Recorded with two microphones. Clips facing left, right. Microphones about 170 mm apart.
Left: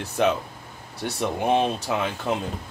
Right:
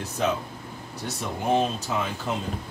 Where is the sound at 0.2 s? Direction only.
70° left (ahead or behind).